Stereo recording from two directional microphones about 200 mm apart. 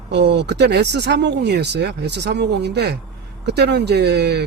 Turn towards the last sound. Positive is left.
turn(degrees=-55)  # may be behind; listen again after turning